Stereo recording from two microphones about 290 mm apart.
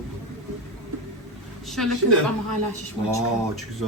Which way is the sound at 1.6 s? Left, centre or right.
Centre.